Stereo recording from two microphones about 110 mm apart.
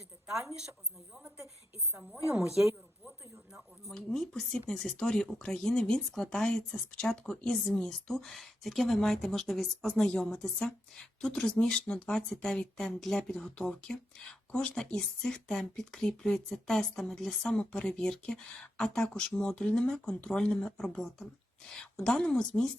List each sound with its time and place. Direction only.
0.3 s a woman's voice: 5° right (ahead or behind)